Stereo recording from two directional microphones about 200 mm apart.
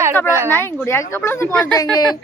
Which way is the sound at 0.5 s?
15° left (ahead or behind).